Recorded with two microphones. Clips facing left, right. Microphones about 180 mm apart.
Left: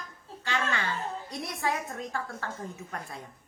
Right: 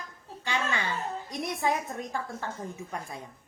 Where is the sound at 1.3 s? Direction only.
20° right (ahead or behind).